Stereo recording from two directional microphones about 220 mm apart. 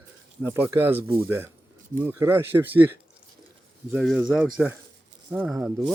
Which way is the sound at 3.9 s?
Centre (ahead or behind).